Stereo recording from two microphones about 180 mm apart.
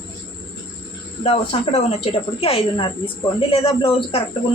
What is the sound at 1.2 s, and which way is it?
Speech, 35° left (ahead or behind).